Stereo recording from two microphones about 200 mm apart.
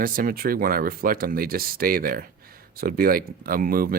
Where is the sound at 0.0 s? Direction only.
45° right (ahead or behind).